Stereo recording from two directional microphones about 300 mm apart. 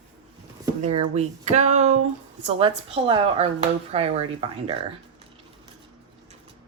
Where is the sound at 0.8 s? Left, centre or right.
Right.